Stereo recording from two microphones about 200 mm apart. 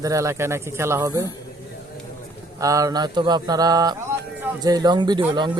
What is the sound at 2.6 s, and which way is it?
Speech, 15° right (ahead or behind).